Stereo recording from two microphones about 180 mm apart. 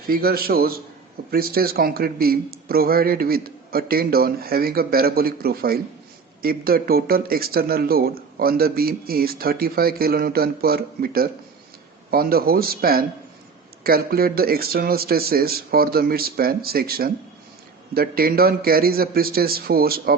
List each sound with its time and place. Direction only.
0.1 s speech: 55° right (ahead or behind)